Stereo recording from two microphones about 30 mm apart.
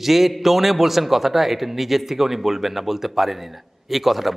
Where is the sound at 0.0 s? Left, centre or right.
Centre.